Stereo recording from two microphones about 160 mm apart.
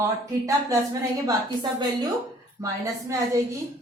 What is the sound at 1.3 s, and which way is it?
A woman's voice, 30° right (ahead or behind).